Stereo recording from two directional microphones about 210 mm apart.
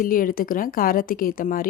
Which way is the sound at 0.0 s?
40° left (ahead or behind).